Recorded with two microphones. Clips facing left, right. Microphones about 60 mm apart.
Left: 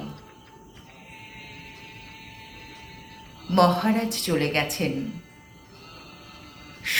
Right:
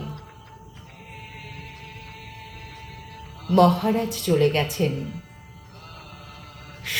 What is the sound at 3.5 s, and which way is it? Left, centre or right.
A woman's voice, left.